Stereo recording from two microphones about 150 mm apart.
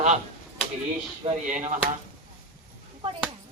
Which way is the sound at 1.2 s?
35° right (ahead or behind).